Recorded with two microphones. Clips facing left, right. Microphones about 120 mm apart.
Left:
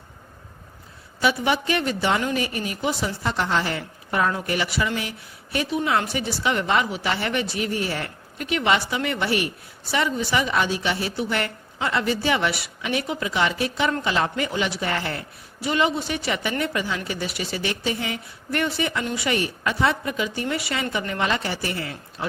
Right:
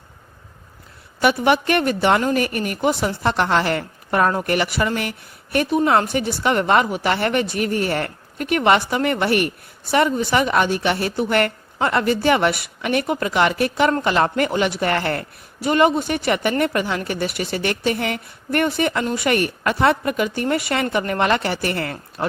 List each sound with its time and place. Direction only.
1.2 s a woman's voice: 60° right (ahead or behind)